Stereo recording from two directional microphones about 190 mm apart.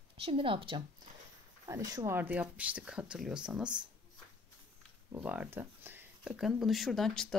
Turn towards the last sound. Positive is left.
turn(degrees=0)  # may be behind; listen again after turning